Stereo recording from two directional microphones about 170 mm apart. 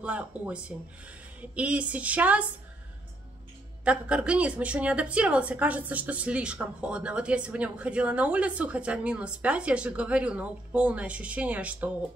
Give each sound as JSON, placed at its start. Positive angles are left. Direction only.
{"t": 0.0, "sound": "a woman's voice", "side_deg": -5}
{"t": 3.8, "sound": "a woman's voice", "side_deg": -5}